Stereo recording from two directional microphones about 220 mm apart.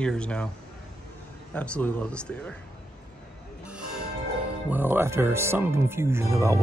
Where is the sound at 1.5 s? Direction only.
5° left (ahead or behind).